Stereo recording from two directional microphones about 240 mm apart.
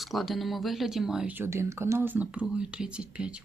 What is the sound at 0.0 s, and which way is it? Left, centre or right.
Speech, centre.